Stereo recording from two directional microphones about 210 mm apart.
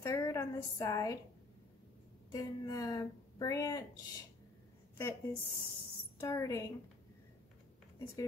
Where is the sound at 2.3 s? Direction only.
15° left (ahead or behind).